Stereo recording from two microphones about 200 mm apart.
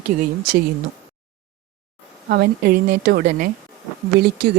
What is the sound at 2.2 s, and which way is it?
Speech, 50° right (ahead or behind).